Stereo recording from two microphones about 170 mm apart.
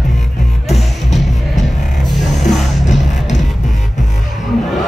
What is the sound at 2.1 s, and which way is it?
Music, centre (ahead or behind).